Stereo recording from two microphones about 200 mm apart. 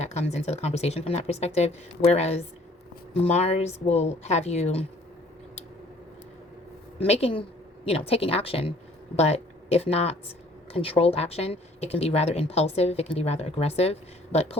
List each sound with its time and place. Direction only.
0.0 s speech: 35° left (ahead or behind)
7.0 s speech: 30° left (ahead or behind)